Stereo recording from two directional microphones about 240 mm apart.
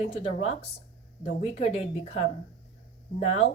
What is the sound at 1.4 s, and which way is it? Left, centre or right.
Speech, left.